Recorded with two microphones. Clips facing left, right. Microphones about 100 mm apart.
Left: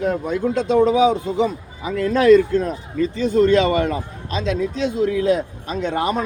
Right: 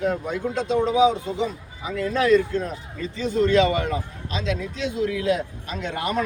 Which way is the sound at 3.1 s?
45° left (ahead or behind).